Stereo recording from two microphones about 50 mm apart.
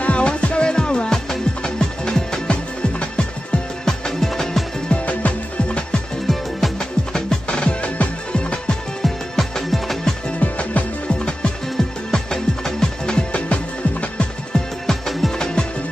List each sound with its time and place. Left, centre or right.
0.0 s music: left
3.8 s music: centre
4.8 s music: left
6.6 s music: centre
7.4 s music: left
9.0 s music: centre
10.4 s music: left
12.1 s music: centre
14.9 s music: centre
15.3 s music: centre